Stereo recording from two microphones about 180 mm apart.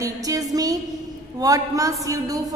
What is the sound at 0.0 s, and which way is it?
Music, 20° right (ahead or behind).